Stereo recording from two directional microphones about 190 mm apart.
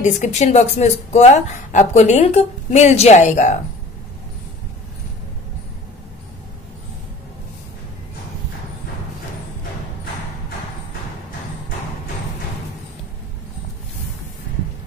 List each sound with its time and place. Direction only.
0.0 s speech: 40° left (ahead or behind)